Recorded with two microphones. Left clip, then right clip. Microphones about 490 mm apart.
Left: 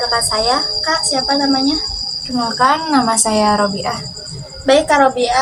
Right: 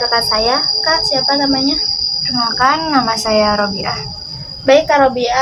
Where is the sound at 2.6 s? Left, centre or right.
Right.